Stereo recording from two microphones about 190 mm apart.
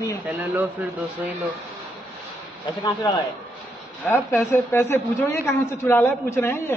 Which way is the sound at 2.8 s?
25° left (ahead or behind).